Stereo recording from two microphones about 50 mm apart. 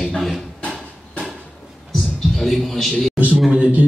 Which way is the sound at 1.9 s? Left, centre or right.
Centre.